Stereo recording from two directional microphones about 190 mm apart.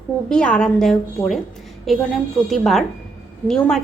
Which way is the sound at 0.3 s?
5° left (ahead or behind).